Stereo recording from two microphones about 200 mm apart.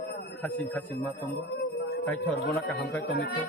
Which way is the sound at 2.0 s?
5° left (ahead or behind).